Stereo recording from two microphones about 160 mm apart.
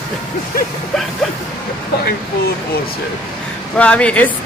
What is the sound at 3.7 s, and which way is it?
Speech, 5° left (ahead or behind).